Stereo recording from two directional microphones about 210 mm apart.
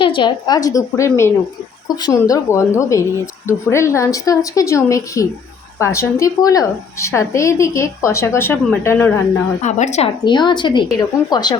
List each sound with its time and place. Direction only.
0.0 s a woman's voice: 20° left (ahead or behind)
9.6 s a woman's voice: 35° left (ahead or behind)
10.2 s speech: 20° left (ahead or behind)